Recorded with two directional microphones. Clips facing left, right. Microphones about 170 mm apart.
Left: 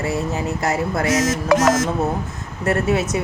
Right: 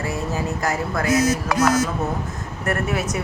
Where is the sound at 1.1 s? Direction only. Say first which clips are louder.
Left 1 dB; 90° left.